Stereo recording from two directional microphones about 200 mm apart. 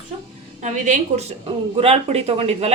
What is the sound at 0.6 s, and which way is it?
A woman's voice, 35° right (ahead or behind).